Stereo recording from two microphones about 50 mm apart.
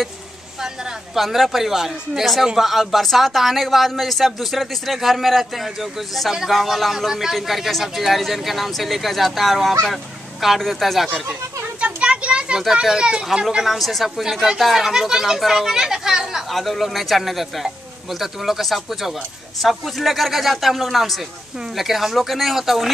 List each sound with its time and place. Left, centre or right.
1.1 s speech: centre
11.8 s children playing: right
12.8 s speech: centre
13.7 s speech: centre
16.5 s speech: centre